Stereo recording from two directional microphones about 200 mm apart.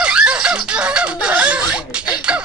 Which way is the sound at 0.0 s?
5° right (ahead or behind).